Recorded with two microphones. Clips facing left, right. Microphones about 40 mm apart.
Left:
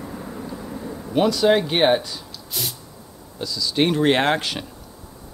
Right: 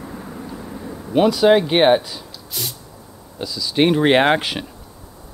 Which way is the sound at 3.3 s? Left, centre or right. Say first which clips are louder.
Right 2 dB; centre.